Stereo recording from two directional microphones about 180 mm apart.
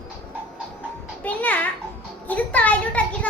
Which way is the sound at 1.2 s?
10° left (ahead or behind).